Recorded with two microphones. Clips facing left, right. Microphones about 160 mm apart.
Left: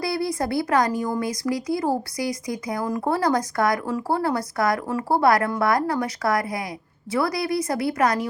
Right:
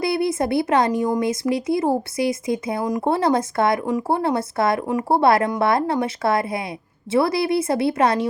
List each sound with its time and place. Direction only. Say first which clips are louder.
0.0 s speech: right 4 dB; 25° right (ahead or behind)